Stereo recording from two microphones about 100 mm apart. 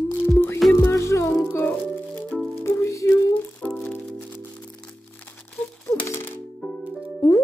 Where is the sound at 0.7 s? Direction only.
25° left (ahead or behind).